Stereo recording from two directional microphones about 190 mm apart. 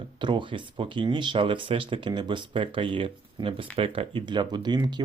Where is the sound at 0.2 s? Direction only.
25° right (ahead or behind).